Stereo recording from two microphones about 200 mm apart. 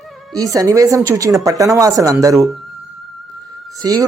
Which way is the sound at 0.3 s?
15° right (ahead or behind).